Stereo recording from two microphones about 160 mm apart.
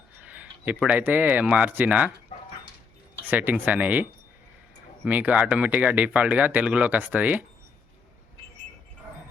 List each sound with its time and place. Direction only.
0.3 s speech: 10° right (ahead or behind)
3.2 s speech: 10° right (ahead or behind)
5.0 s speech: 10° right (ahead or behind)